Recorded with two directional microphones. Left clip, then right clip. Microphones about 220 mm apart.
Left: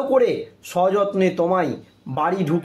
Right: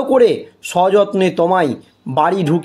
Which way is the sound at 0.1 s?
40° right (ahead or behind).